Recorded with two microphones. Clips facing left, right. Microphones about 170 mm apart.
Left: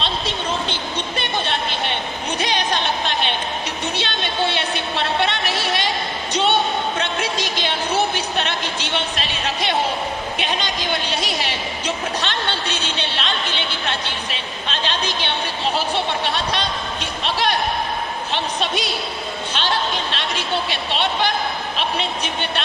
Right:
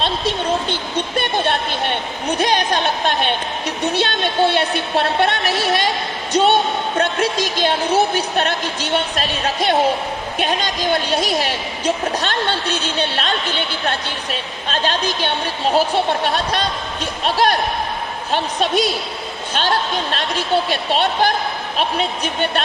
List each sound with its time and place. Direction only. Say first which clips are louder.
1.1 s a woman's voice: right 6 dB; 50° right (ahead or behind)